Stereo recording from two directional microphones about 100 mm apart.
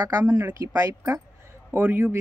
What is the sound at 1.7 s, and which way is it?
Speech, 20° right (ahead or behind).